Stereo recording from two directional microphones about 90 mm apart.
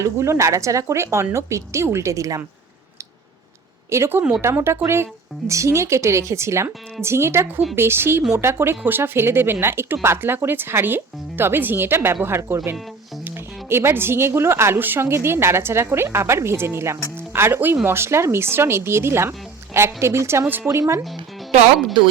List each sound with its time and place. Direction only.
0.0 s a woman's voice: 30° right (ahead or behind)
3.8 s a woman's voice: 30° right (ahead or behind)